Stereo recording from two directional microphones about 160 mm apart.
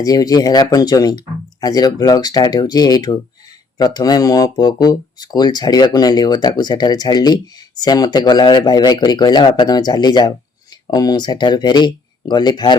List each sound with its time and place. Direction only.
0.0 s speech: 25° left (ahead or behind)